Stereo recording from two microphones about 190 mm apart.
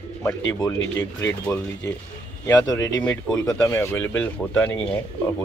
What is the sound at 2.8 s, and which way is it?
Speech, 80° left.